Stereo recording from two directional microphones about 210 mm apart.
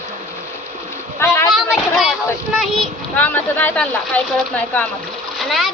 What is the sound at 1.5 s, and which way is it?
A child's voice, centre (ahead or behind).